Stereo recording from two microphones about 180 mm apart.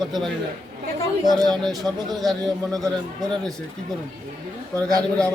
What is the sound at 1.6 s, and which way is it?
Speech, centre (ahead or behind).